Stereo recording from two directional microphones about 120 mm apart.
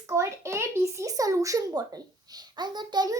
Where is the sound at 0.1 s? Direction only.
25° right (ahead or behind).